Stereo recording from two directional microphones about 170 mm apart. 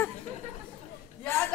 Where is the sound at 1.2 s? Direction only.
15° left (ahead or behind).